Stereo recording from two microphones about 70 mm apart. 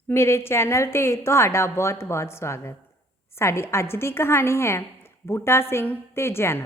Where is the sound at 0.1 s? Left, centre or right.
Left.